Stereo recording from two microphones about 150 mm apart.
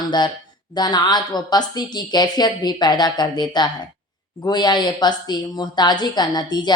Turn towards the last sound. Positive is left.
turn(degrees=30)  # may be behind; listen again after turning